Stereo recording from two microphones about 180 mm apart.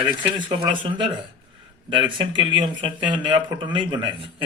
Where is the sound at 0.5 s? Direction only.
25° right (ahead or behind).